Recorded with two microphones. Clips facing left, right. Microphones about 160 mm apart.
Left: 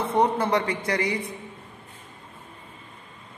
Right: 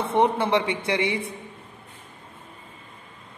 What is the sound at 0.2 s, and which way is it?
Speech, 25° right (ahead or behind).